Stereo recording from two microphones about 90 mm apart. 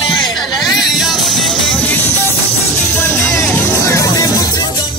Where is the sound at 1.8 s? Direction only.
20° left (ahead or behind); by 4.6 s 40° left (ahead or behind).